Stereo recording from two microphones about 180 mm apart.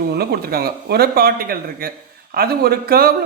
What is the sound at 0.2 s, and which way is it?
Speech, 60° right (ahead or behind).